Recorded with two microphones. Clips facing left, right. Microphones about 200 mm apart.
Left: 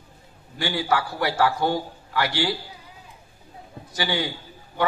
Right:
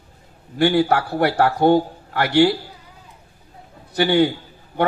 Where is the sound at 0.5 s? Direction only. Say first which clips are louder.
Right 8 dB; 60° right (ahead or behind).